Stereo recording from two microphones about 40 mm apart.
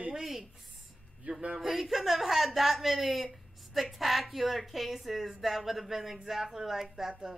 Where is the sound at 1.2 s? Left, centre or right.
Right.